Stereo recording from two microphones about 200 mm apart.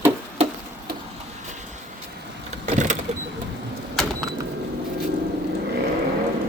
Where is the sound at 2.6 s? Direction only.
35° right (ahead or behind).